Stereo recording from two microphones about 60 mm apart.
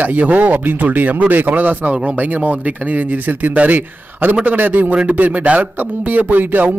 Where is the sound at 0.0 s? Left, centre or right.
Right.